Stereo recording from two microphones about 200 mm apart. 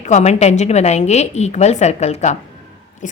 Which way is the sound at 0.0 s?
35° left (ahead or behind).